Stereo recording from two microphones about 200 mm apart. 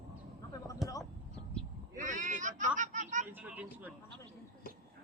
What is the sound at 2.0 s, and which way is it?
Speech, 40° right (ahead or behind).